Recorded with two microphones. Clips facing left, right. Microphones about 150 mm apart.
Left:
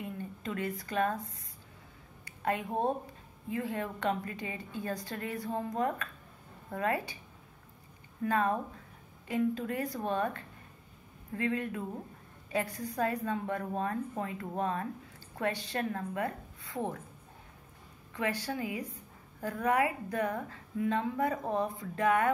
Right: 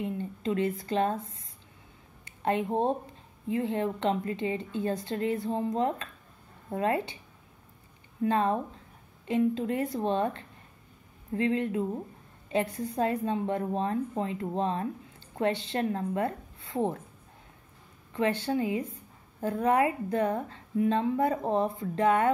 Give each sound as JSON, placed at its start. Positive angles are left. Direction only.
{"t": 0.0, "sound": "a woman's voice", "side_deg": -25}
{"t": 8.2, "sound": "a woman's voice", "side_deg": -25}
{"t": 18.1, "sound": "a woman's voice", "side_deg": -30}